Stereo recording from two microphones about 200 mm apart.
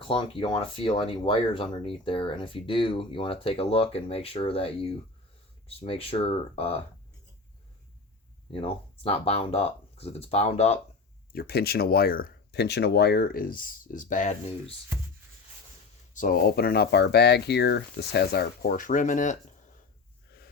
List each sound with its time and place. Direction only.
0.1 s speech: 25° left (ahead or behind)
8.5 s speech: 30° left (ahead or behind)
11.3 s speech: 50° left (ahead or behind); by 14.8 s 35° left (ahead or behind)
16.1 s speech: 45° left (ahead or behind)